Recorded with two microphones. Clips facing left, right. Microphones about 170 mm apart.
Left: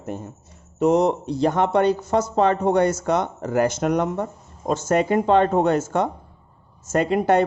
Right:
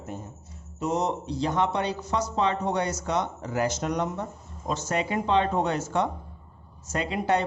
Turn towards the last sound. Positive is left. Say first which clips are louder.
# left 7 dB
turn(degrees=50)  # may be behind; listen again after turning